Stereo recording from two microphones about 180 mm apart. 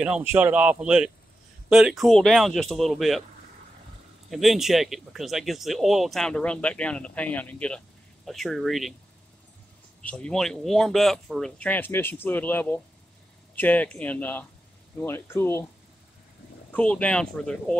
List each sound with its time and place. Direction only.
0.0 s speech: 10° right (ahead or behind)
4.3 s speech: centre (ahead or behind)
10.0 s speech: 5° left (ahead or behind)
16.7 s speech: 5° left (ahead or behind)